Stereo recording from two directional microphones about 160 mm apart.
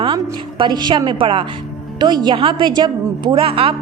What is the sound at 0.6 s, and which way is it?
A woman's voice, 30° right (ahead or behind).